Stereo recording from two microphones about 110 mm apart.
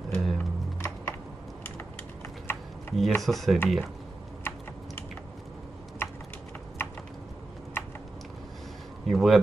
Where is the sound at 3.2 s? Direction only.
Centre (ahead or behind).